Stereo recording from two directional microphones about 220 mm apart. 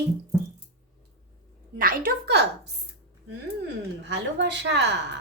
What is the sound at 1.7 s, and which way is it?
Speech, 40° right (ahead or behind).